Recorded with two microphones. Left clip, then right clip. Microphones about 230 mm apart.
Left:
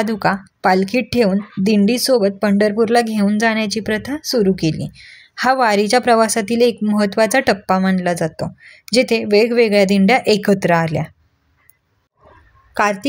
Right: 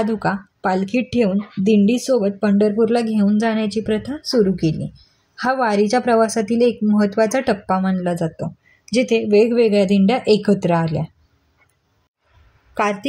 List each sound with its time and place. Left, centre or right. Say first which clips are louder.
0.0 s speech: left 3 dB; left